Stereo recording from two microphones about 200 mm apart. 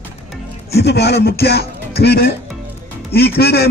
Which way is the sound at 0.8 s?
55° left (ahead or behind).